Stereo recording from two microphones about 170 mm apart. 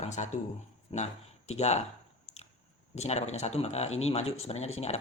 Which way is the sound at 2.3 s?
40° left (ahead or behind).